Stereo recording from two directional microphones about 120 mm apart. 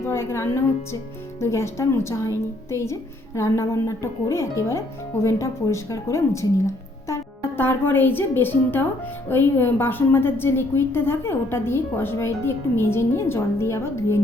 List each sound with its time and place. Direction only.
0.0 s a woman's voice: 20° left (ahead or behind)